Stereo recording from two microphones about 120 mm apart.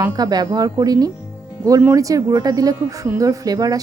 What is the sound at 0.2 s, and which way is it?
Speech, 35° right (ahead or behind).